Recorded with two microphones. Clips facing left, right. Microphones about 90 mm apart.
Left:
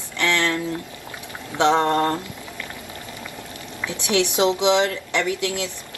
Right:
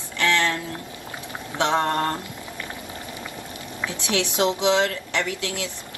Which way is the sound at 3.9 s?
20° left (ahead or behind).